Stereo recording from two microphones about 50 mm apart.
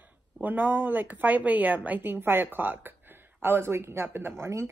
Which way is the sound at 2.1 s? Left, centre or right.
Right.